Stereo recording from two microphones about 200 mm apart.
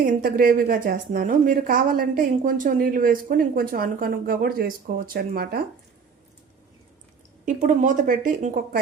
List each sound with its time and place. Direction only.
0.0 s a woman's voice: 45° right (ahead or behind)
7.4 s a woman's voice: 40° right (ahead or behind)